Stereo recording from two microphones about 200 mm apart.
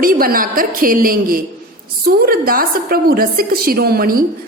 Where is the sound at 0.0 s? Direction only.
45° right (ahead or behind).